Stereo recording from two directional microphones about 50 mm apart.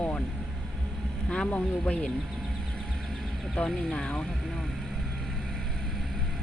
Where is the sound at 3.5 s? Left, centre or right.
Centre.